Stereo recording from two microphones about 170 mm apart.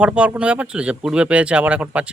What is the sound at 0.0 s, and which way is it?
Speech, 5° right (ahead or behind).